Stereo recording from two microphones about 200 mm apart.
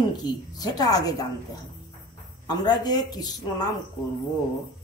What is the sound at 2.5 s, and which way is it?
A woman's voice, 20° left (ahead or behind).